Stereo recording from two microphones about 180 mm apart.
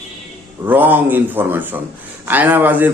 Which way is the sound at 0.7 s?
10° right (ahead or behind).